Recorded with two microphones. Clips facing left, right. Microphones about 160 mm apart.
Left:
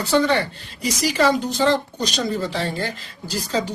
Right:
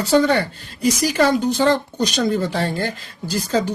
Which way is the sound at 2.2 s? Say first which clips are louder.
Right 4 dB; 55° right (ahead or behind).